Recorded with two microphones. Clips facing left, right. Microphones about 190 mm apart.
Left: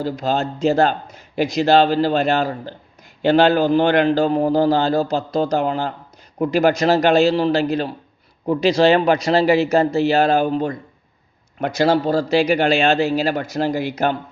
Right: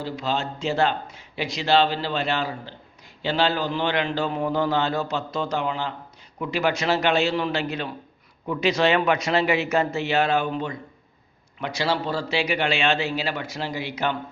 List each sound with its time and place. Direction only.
0.0 s a man's voice: 45° left (ahead or behind)